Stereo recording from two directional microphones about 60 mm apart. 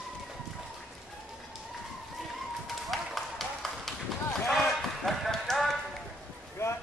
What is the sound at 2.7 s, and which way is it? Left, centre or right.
Run, centre.